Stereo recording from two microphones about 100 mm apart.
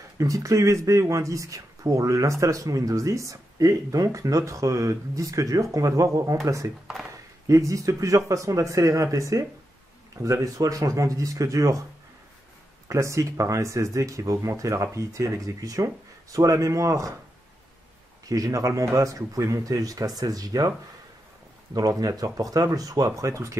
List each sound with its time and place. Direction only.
0.2 s speech: 35° right (ahead or behind)
12.8 s speech: 30° right (ahead or behind)
18.3 s speech: 35° right (ahead or behind)
21.7 s speech: 35° right (ahead or behind)